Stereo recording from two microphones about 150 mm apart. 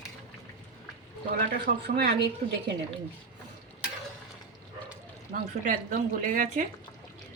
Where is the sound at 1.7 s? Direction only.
55° right (ahead or behind).